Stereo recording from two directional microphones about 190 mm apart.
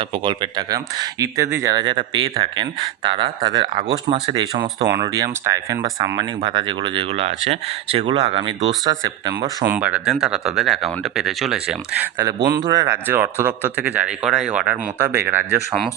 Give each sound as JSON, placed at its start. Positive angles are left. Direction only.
{"t": 0.3, "sound": "speech", "side_deg": -20}
{"t": 9.7, "sound": "speech", "side_deg": -5}